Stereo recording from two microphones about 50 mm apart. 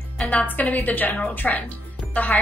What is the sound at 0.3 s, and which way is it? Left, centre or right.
Speech, left.